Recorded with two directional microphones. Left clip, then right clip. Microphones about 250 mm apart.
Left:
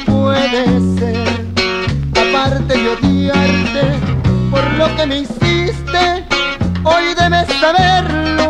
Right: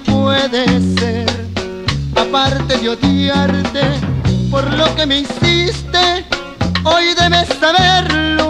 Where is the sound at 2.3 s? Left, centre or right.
Left.